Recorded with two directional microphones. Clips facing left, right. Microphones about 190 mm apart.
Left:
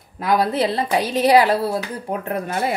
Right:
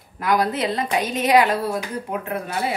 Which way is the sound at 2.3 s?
45° left (ahead or behind).